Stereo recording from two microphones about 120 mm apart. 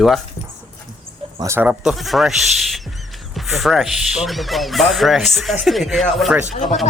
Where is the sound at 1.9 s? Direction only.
Centre (ahead or behind).